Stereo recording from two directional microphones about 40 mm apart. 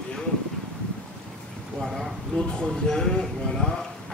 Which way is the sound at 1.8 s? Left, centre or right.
Centre.